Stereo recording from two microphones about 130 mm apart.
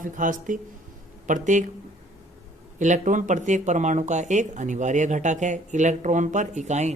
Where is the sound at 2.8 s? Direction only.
75° right (ahead or behind).